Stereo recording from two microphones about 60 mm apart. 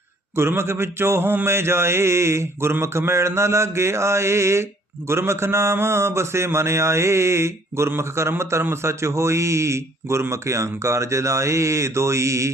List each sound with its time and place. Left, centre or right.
0.3 s mantra: right
8.7 s a man's voice: right